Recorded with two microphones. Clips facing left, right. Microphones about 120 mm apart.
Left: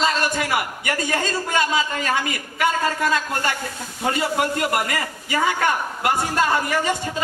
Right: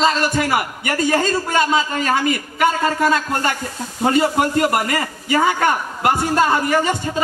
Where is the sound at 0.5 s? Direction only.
30° right (ahead or behind).